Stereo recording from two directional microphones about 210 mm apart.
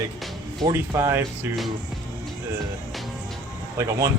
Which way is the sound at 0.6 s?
15° right (ahead or behind).